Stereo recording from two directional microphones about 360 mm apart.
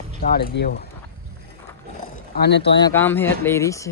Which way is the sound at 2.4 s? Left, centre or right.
Left.